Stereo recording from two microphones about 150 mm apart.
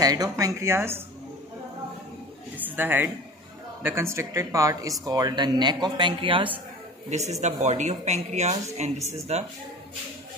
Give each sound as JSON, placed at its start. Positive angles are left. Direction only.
{"t": 0.0, "sound": "speech", "side_deg": -25}
{"t": 2.5, "sound": "a sound", "side_deg": -10}
{"t": 3.8, "sound": "speech", "side_deg": -15}
{"t": 7.1, "sound": "speech", "side_deg": -50}